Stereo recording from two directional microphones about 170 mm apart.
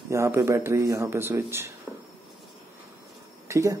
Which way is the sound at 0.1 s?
15° right (ahead or behind).